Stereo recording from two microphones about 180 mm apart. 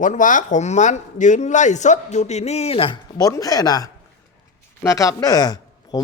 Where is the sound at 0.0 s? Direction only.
45° left (ahead or behind).